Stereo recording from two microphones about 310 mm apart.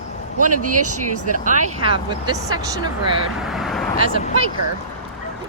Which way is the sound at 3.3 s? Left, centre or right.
Centre.